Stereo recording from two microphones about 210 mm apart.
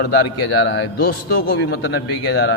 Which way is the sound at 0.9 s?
45° left (ahead or behind).